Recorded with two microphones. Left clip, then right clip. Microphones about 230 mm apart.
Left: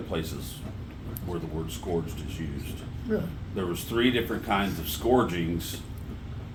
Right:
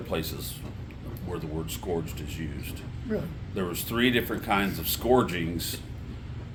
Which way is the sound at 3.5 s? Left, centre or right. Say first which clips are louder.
Even; right.